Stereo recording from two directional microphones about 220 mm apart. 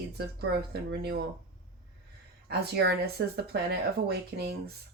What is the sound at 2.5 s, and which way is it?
Speech, 45° right (ahead or behind).